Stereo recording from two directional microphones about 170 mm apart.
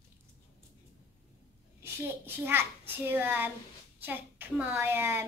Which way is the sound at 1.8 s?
15° right (ahead or behind).